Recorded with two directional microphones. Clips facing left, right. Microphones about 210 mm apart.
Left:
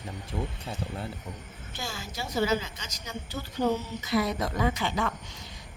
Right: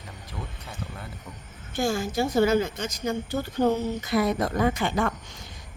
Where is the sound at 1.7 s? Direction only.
50° right (ahead or behind).